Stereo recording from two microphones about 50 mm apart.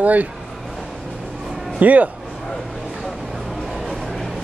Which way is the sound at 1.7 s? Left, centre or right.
Right.